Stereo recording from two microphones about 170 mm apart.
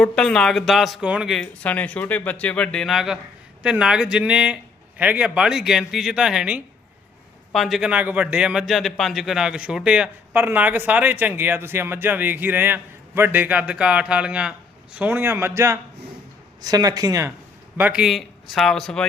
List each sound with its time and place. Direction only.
0.0 s a man's voice: 5° left (ahead or behind); by 17.3 s 20° right (ahead or behind)
17.7 s speech: 10° right (ahead or behind)